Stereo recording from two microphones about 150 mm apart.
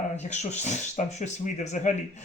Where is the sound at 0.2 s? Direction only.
50° left (ahead or behind).